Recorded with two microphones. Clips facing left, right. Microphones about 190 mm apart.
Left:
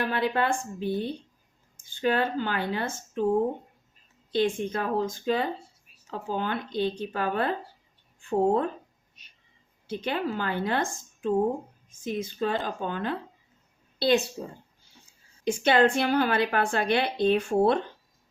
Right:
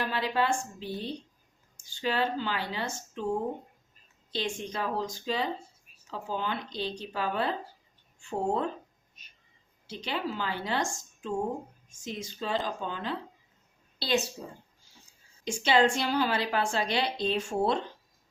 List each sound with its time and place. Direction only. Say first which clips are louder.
0.0 s a woman's voice: left 3 dB; 55° left (ahead or behind)
4.3 s speech: left 8 dB; 55° left (ahead or behind)
9.8 s a woman's voice: left 5 dB; 55° left (ahead or behind)
15.6 s a woman's voice: left 3 dB; 55° left (ahead or behind)